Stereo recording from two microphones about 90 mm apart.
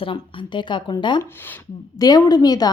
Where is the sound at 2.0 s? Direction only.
45° left (ahead or behind).